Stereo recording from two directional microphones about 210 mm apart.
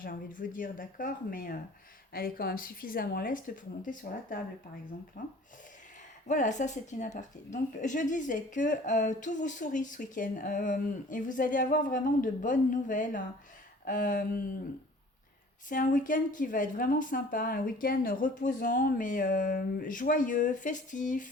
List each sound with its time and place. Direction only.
0.0 s a woman's voice: 40° left (ahead or behind)
15.7 s a woman's voice: 40° left (ahead or behind)